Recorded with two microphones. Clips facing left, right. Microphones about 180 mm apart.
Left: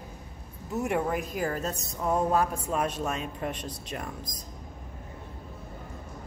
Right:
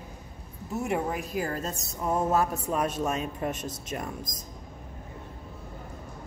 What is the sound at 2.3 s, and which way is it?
Speech, 40° right (ahead or behind).